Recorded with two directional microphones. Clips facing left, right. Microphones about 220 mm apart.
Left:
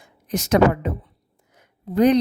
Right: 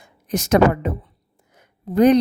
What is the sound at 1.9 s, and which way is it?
Speech, 50° right (ahead or behind).